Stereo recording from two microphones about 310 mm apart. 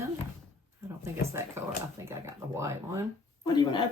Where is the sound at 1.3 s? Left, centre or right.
Centre.